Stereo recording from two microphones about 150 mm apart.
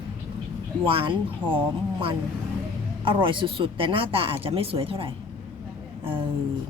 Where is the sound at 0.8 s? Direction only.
35° right (ahead or behind).